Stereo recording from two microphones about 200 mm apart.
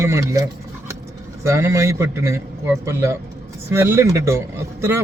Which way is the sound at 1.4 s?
15° right (ahead or behind).